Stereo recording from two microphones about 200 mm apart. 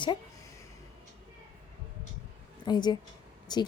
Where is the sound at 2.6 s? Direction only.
20° left (ahead or behind).